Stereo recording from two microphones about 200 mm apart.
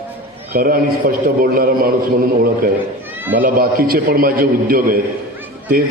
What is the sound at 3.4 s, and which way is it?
A man's voice, 45° right (ahead or behind).